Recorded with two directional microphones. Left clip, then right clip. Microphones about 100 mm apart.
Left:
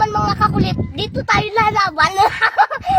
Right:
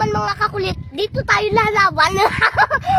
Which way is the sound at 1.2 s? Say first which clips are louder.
Left 1 dB; 30° right (ahead or behind).